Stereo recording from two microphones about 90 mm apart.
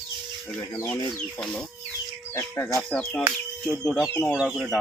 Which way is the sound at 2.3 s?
30° left (ahead or behind).